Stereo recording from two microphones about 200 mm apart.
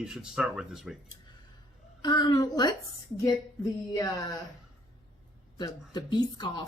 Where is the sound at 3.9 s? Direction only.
15° left (ahead or behind).